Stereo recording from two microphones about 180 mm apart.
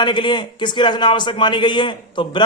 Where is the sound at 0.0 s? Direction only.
25° left (ahead or behind).